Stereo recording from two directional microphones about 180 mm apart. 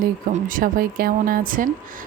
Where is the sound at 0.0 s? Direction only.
50° right (ahead or behind).